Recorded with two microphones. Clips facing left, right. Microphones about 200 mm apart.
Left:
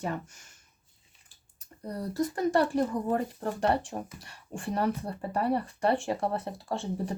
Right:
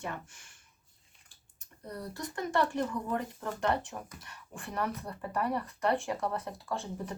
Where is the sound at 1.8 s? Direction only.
35° left (ahead or behind).